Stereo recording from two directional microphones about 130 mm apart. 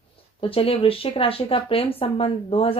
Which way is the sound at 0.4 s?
45° left (ahead or behind).